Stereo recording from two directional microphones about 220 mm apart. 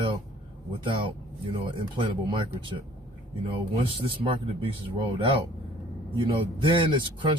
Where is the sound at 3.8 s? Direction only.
25° right (ahead or behind).